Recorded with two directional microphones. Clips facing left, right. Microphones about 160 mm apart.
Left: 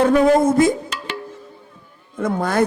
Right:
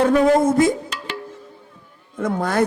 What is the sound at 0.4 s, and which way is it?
Music, 10° left (ahead or behind).